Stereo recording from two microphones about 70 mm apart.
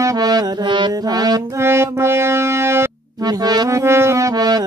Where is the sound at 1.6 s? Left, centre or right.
Right.